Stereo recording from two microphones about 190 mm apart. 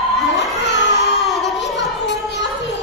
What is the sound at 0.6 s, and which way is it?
Baby cry, 65° left (ahead or behind).